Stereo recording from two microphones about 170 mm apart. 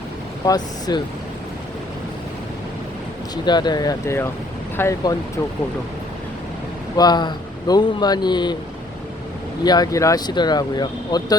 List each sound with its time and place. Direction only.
0.4 s speech: 25° left (ahead or behind)
3.4 s speech: 25° left (ahead or behind)
6.9 s speech: 25° left (ahead or behind)
9.6 s speech: 25° left (ahead or behind)